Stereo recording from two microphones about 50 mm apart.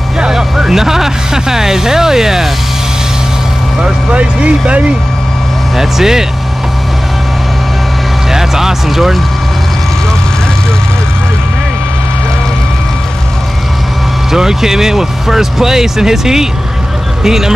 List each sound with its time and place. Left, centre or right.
0.2 s speech: centre
3.8 s speech: right
5.8 s speech: centre
8.3 s speech: centre
14.3 s speech: centre